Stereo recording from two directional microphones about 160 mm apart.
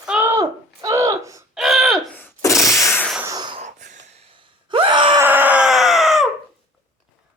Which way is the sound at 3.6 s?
50° right (ahead or behind).